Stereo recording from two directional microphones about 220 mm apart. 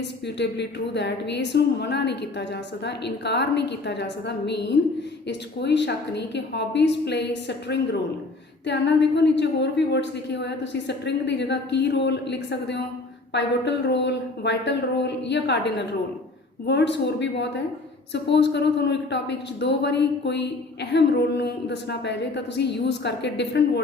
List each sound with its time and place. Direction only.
0.3 s a woman's voice: 50° left (ahead or behind)